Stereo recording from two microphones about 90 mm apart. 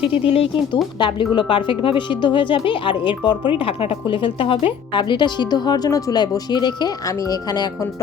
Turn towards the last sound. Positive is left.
turn(degrees=45)  # may be behind; listen again after turning